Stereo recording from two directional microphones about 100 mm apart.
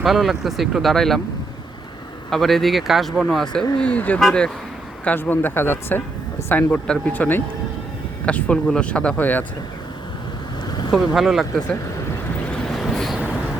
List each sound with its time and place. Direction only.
0.0 s speech: centre (ahead or behind)
2.3 s speech: centre (ahead or behind)
4.2 s speech: 5° left (ahead or behind)
5.0 s speech: 20° left (ahead or behind)
10.9 s speech: centre (ahead or behind)
12.5 s boat: 5° left (ahead or behind)
13.1 s vehicle: 10° right (ahead or behind)